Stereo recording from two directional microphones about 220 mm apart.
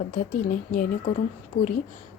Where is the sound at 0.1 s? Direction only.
40° left (ahead or behind).